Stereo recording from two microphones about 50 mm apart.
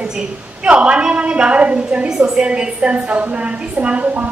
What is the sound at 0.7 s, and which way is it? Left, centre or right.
A woman's voice, right.